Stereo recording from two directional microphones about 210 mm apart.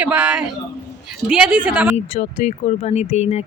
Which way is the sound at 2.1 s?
35° left (ahead or behind).